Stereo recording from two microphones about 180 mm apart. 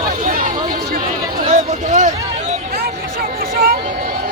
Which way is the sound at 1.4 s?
45° right (ahead or behind).